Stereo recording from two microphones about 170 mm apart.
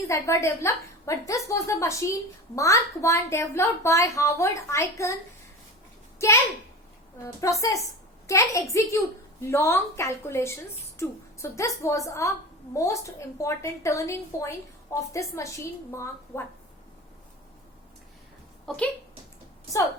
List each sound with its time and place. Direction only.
0.1 s a woman's voice: 15° left (ahead or behind)
6.1 s a woman's voice: 15° left (ahead or behind)
7.4 s a woman's voice: 20° left (ahead or behind)
18.6 s speech: centre (ahead or behind)